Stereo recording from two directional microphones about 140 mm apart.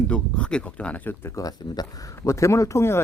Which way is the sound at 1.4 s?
25° left (ahead or behind).